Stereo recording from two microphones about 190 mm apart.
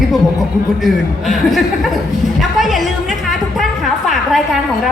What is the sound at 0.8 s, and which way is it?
Speech, centre (ahead or behind).